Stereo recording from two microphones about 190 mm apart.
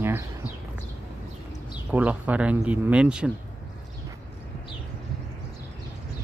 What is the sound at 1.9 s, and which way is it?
Speech, 10° right (ahead or behind).